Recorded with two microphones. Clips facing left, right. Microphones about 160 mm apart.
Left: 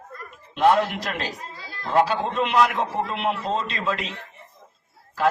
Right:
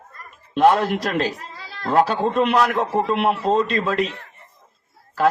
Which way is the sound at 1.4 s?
75° right (ahead or behind).